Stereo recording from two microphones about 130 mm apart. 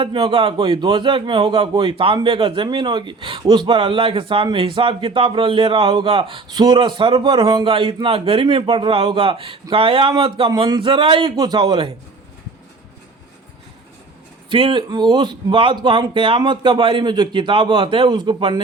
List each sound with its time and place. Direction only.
0.0 s a man's voice: 40° right (ahead or behind)
14.5 s a man's voice: 40° right (ahead or behind)